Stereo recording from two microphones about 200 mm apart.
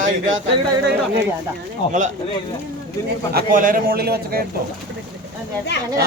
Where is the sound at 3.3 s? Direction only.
45° right (ahead or behind).